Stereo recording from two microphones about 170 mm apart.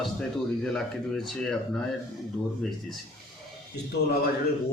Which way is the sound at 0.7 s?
Centre (ahead or behind).